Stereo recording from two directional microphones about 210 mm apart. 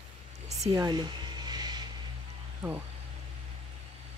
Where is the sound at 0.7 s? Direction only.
20° right (ahead or behind).